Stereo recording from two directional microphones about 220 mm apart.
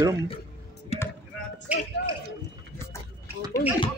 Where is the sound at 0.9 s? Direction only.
25° left (ahead or behind).